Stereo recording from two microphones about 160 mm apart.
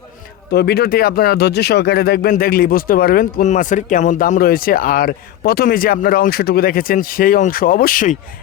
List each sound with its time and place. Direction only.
0.5 s speech: 90° left
2.3 s speech: 65° left (ahead or behind)